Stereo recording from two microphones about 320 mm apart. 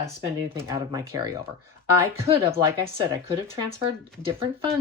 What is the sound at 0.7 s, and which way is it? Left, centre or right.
Speech, centre.